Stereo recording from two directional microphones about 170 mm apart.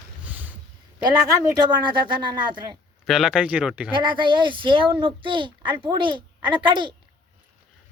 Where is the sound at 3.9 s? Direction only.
30° right (ahead or behind).